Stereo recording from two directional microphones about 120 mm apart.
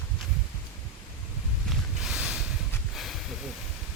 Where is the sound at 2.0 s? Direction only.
5° right (ahead or behind).